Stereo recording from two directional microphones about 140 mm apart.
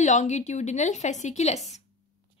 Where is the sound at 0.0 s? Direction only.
60° left (ahead or behind).